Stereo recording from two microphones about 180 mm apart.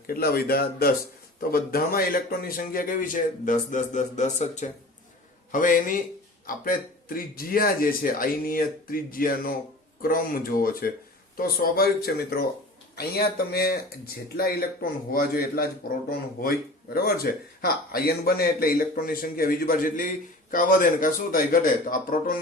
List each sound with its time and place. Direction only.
0.1 s speech: 60° left (ahead or behind)